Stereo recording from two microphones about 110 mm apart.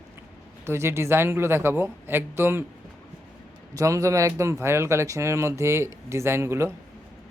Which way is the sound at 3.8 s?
30° right (ahead or behind).